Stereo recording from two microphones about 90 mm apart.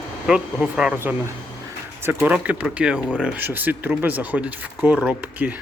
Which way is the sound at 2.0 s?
20° right (ahead or behind).